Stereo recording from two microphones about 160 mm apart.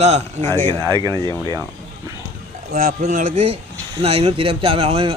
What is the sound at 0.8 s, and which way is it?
Speech, 25° right (ahead or behind).